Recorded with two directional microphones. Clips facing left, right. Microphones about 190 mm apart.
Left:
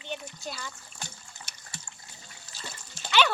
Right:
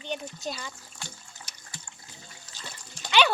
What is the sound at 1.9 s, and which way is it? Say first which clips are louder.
Water: even; 10° left (ahead or behind).